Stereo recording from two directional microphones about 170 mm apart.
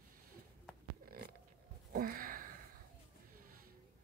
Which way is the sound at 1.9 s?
55° right (ahead or behind).